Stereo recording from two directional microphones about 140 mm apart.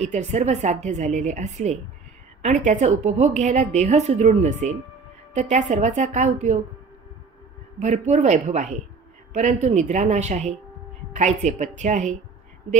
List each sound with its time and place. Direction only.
0.0 s a woman's voice: 55° right (ahead or behind)
7.8 s a woman's voice: 55° right (ahead or behind)